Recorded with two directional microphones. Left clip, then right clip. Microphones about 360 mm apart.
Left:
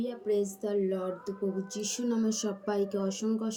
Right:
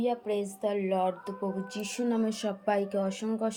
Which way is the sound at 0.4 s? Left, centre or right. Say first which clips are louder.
Even; centre.